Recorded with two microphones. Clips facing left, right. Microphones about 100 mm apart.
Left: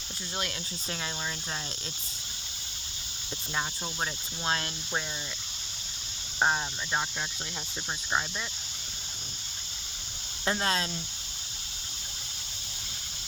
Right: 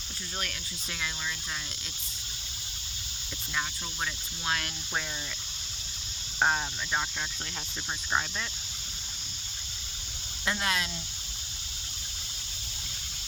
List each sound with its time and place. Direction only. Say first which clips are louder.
3.5 s speech: left 1 dB; 30° left (ahead or behind)
6.4 s speech: even; 10° left (ahead or behind)
10.4 s speech: left 2 dB; 35° left (ahead or behind)